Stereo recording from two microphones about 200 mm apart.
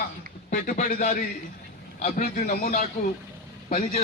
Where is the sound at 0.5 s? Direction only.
40° left (ahead or behind).